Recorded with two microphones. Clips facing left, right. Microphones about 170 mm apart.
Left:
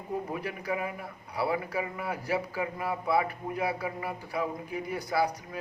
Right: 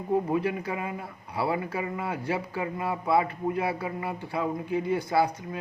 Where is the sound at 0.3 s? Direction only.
25° right (ahead or behind).